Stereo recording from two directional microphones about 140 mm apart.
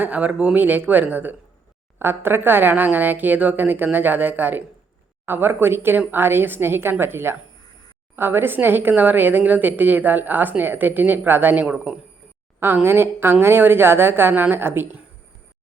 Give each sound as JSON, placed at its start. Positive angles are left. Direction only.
{"t": 0.0, "sound": "a woman's voice", "side_deg": -10}